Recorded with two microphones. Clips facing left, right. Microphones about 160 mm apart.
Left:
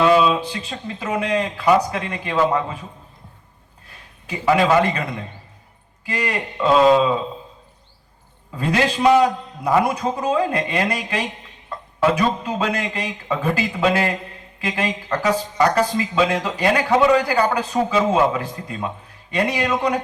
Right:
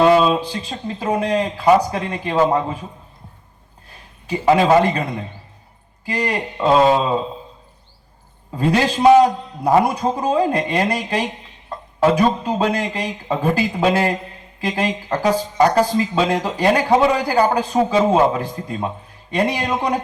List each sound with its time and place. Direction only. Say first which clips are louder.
0.0 s speech: right 2 dB; 35° right (ahead or behind)
4.3 s speech: right 3 dB; 30° right (ahead or behind)
6.1 s speech: right 2 dB; 30° right (ahead or behind)
8.5 s speech: right 3 dB; 30° right (ahead or behind)